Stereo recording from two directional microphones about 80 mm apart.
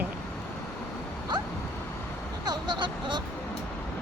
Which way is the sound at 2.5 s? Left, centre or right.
Right.